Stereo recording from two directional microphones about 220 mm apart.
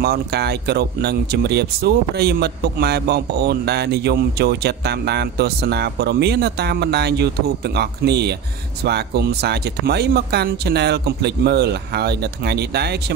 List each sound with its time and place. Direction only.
0.0 s speech: 45° right (ahead or behind)